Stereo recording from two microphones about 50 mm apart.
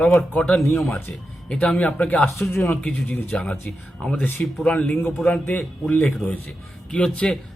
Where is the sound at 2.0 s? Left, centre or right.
Left; by 3.6 s centre.